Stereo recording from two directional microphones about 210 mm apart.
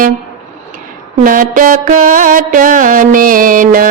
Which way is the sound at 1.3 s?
40° right (ahead or behind).